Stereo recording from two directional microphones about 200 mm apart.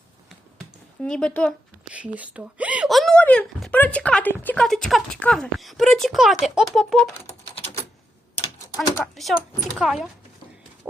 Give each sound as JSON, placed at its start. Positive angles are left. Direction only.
{"t": 1.0, "sound": "speech", "side_deg": 5}
{"t": 1.9, "sound": "speech", "side_deg": -5}
{"t": 8.6, "sound": "speech", "side_deg": 15}
{"t": 9.7, "sound": "speech", "side_deg": 0}